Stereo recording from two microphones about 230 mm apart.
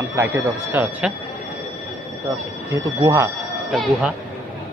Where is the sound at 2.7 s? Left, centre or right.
Centre.